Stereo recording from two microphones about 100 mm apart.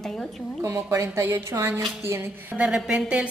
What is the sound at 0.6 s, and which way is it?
A woman's voice, 25° right (ahead or behind).